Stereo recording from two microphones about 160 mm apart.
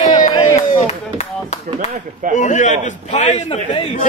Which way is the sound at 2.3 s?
50° left (ahead or behind).